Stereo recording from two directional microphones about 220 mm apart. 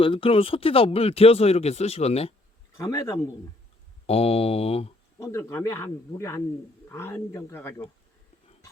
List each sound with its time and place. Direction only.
0.0 s speech: 25° left (ahead or behind)
2.7 s speech: 15° left (ahead or behind)
4.0 s speech: 25° left (ahead or behind)
5.2 s speech: 10° left (ahead or behind)